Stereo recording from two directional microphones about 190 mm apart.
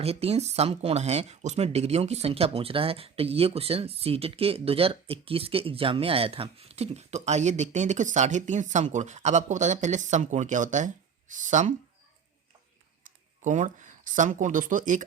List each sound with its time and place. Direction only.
0.0 s speech: 30° right (ahead or behind)
13.4 s speech: 40° right (ahead or behind)